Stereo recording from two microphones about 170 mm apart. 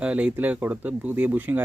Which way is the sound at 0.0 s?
10° right (ahead or behind).